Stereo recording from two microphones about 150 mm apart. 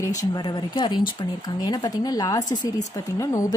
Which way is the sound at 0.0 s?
25° left (ahead or behind).